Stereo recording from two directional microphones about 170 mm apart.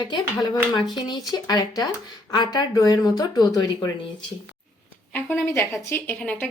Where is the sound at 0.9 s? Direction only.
25° left (ahead or behind).